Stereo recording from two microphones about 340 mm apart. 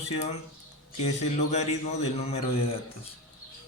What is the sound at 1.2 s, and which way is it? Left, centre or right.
A man's voice, centre.